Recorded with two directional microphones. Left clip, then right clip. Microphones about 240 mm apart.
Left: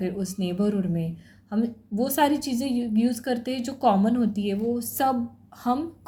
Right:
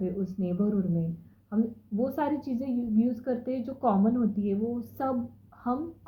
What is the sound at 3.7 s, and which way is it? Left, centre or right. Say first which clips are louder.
Speech: left 5 dB; left.